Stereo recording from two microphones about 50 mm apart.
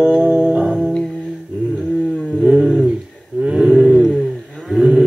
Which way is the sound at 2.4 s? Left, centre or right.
Centre.